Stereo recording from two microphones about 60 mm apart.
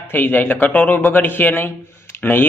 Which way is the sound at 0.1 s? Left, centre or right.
Left.